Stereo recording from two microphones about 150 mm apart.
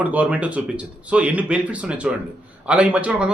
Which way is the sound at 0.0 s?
10° right (ahead or behind).